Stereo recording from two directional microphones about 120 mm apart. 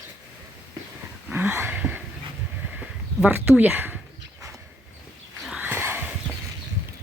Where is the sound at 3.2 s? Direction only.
15° right (ahead or behind).